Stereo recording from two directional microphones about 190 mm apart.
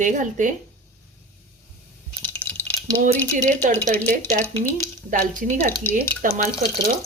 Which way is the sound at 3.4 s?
40° right (ahead or behind).